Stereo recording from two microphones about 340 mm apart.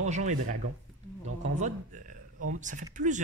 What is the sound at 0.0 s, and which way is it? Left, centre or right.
Speech, right.